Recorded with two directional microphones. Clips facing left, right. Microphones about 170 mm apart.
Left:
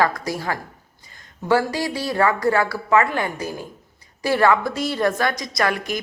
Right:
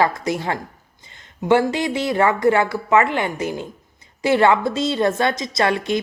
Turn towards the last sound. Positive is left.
turn(degrees=-25)  # may be behind; listen again after turning